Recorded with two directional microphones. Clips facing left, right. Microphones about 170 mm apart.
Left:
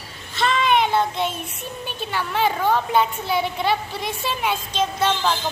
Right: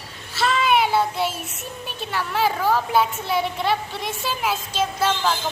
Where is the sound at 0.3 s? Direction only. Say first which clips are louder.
Even; 5° right (ahead or behind).